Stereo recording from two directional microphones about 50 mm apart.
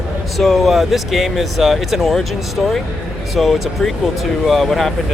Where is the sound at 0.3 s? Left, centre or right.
Centre.